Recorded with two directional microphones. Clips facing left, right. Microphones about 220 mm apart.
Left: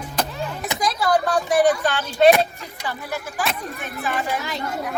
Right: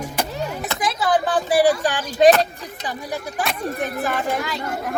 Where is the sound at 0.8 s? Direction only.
5° right (ahead or behind).